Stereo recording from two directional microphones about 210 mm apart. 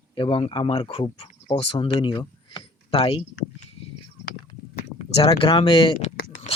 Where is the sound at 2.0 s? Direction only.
20° left (ahead or behind).